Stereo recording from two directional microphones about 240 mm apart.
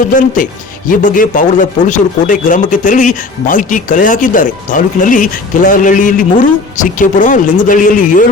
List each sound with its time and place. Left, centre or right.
0.1 s speech: left